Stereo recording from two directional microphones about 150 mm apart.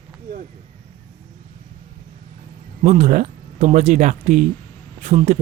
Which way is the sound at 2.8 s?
55° right (ahead or behind).